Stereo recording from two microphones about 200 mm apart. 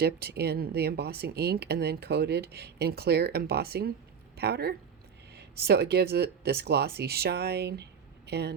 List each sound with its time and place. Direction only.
0.0 s speech: 50° right (ahead or behind)